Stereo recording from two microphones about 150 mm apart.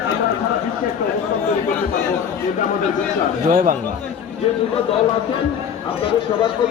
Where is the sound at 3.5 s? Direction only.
60° right (ahead or behind).